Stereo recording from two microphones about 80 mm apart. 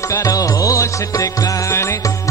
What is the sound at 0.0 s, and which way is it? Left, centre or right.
Music, left.